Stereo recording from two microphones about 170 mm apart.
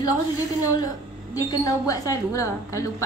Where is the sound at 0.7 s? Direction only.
20° left (ahead or behind).